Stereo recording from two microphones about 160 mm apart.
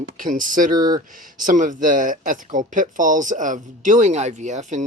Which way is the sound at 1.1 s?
60° right (ahead or behind).